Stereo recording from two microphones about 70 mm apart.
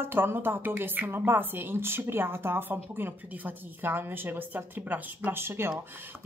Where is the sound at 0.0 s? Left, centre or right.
Right.